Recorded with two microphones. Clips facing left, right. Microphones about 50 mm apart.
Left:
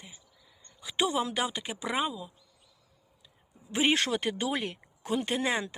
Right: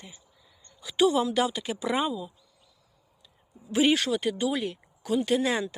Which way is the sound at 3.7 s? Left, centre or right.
Left.